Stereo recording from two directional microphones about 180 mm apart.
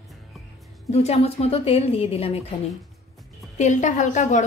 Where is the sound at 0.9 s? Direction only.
35° left (ahead or behind).